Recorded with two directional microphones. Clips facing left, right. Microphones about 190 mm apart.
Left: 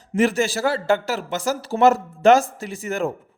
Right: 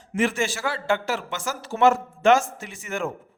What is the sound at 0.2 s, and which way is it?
A man's voice, 35° left (ahead or behind).